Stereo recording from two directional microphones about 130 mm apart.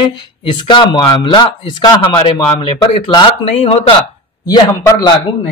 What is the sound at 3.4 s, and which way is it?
Speech, 55° left (ahead or behind).